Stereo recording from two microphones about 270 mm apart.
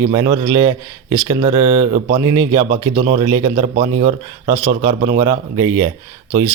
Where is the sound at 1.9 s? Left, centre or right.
Centre.